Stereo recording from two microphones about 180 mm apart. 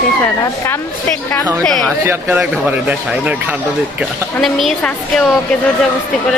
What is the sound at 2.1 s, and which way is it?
Speech, 10° right (ahead or behind).